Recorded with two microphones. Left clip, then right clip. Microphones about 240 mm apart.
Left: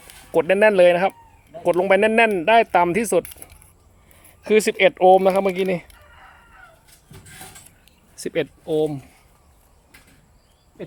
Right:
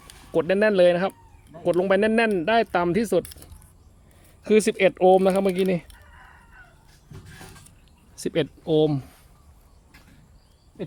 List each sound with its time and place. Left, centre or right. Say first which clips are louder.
0.3 s speech: left 5 dB; centre
8.1 s speech: left 1 dB; centre
8.6 s speech: right 2 dB; right
10.8 s speech: even; right